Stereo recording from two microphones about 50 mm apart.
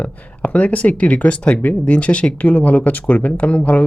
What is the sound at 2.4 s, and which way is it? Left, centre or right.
Speech, left.